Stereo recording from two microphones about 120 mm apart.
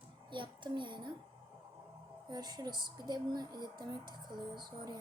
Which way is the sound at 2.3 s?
35° right (ahead or behind).